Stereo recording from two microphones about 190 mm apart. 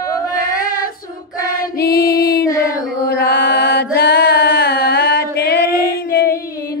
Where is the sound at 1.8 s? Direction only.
55° left (ahead or behind).